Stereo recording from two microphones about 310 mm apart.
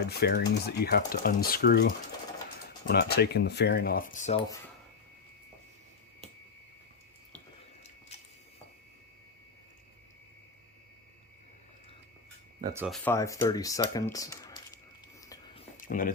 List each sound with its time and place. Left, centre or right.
0.1 s speech: left
12.6 s speech: centre
15.3 s whispering: centre
15.8 s speech: left